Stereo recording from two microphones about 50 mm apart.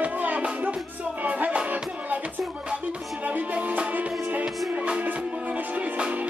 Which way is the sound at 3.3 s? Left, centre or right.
Right.